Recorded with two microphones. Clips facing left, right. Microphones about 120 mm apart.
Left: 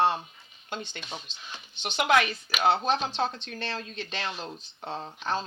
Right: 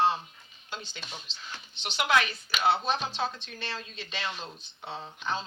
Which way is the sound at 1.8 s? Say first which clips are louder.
Left 3 dB; 50° left (ahead or behind).